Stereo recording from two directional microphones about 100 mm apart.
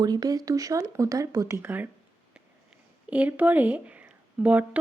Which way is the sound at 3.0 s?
15° right (ahead or behind).